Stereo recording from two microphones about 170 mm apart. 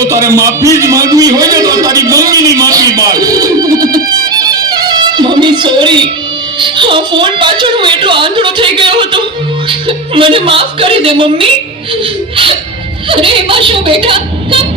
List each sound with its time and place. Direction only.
0.1 s a man's voice: 20° right (ahead or behind)
13.1 s a woman's voice: 30° right (ahead or behind)